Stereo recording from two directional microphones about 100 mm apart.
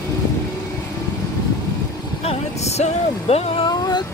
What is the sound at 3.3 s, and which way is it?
Speech, 90° left.